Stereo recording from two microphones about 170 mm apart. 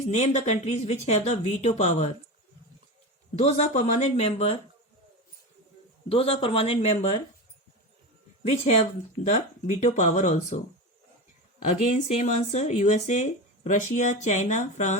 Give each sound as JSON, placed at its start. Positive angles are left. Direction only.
{"t": 0.1, "sound": "speech", "side_deg": 40}
{"t": 3.3, "sound": "speech", "side_deg": 40}
{"t": 6.1, "sound": "speech", "side_deg": 35}
{"t": 8.4, "sound": "speech", "side_deg": 40}
{"t": 11.6, "sound": "speech", "side_deg": 45}